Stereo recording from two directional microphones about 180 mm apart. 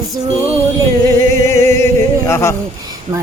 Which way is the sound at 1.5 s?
15° left (ahead or behind).